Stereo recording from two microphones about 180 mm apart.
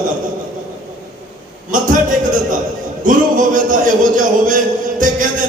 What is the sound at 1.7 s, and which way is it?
Music, 50° right (ahead or behind).